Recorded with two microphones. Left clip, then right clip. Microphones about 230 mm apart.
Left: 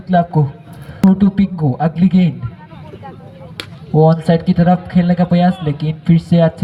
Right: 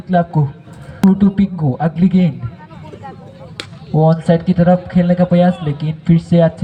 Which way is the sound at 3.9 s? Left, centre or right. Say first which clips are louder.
Left 1 dB; left.